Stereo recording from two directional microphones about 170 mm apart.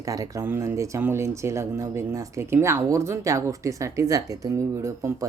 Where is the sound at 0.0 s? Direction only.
20° right (ahead or behind).